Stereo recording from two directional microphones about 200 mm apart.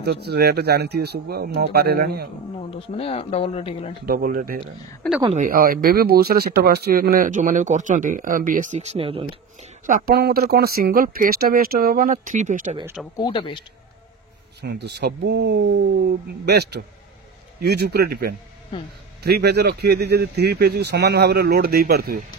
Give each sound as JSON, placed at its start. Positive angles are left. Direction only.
{"t": 0.0, "sound": "speech", "side_deg": -55}
{"t": 2.7, "sound": "speech", "side_deg": 30}
{"t": 4.0, "sound": "speech", "side_deg": -45}
{"t": 9.8, "sound": "speech", "side_deg": -45}
{"t": 13.1, "sound": "speech", "side_deg": 25}
{"t": 14.6, "sound": "speech", "side_deg": -55}